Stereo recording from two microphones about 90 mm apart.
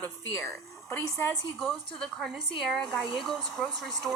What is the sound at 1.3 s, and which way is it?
A woman's voice, centre (ahead or behind).